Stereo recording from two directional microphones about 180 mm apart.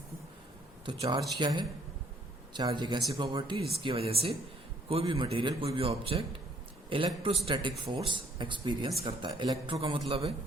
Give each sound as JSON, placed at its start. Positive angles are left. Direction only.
{"t": 0.9, "sound": "a man's voice", "side_deg": -25}